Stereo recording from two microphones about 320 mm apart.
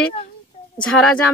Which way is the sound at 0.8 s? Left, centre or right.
Centre.